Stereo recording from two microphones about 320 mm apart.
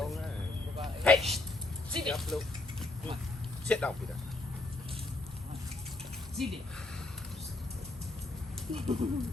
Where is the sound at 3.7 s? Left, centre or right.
Centre.